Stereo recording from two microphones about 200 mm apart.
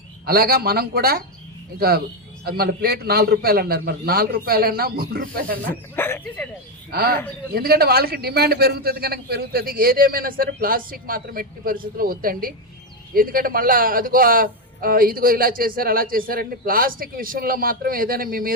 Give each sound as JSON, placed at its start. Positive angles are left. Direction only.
{"t": 0.3, "sound": "a man's voice", "side_deg": -50}
{"t": 5.6, "sound": "speech", "side_deg": 10}
{"t": 6.9, "sound": "a man's voice", "side_deg": -50}